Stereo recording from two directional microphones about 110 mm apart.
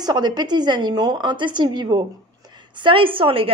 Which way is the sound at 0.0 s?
40° right (ahead or behind).